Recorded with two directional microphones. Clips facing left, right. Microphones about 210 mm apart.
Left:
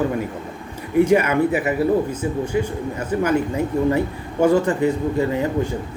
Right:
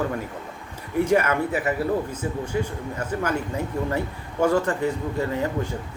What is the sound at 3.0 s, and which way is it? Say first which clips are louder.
Speech: left 5 dB; 20° left (ahead or behind).